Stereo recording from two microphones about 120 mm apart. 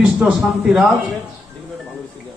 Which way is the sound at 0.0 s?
10° right (ahead or behind).